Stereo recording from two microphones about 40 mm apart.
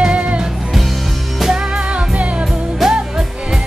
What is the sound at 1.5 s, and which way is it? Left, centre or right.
Music, right.